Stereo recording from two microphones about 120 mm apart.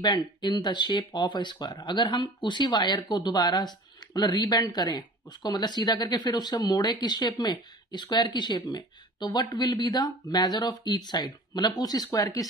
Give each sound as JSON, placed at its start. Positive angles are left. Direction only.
{"t": 0.0, "sound": "speech", "side_deg": 35}